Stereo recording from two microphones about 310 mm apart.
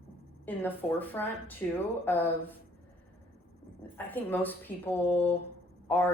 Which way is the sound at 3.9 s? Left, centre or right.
Centre.